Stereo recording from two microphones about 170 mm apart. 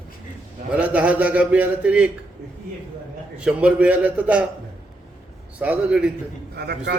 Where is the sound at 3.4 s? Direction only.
5° right (ahead or behind).